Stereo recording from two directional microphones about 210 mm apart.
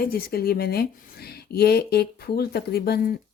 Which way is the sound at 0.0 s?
45° left (ahead or behind).